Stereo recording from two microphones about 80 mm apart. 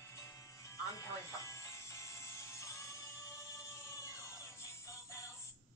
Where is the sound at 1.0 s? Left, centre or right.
Left.